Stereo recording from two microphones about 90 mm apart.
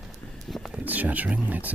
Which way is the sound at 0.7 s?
20° right (ahead or behind).